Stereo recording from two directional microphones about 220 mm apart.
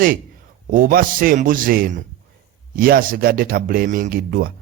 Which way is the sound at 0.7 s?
40° right (ahead or behind).